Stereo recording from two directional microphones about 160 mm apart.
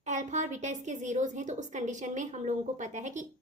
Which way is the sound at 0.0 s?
50° right (ahead or behind).